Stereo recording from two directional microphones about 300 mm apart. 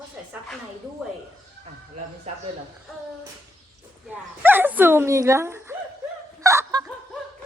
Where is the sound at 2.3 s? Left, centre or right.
Right.